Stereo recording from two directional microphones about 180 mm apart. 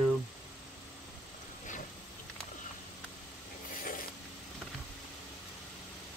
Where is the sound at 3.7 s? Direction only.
50° left (ahead or behind).